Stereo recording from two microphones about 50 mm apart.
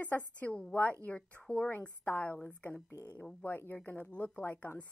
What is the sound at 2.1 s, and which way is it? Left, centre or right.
Speech, left.